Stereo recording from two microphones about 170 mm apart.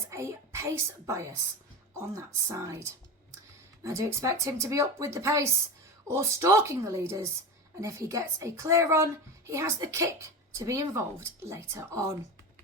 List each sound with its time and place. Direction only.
0.1 s a child's voice: 15° right (ahead or behind)
3.8 s a woman's voice: 20° right (ahead or behind)